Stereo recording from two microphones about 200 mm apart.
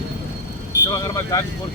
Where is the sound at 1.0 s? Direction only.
15° left (ahead or behind).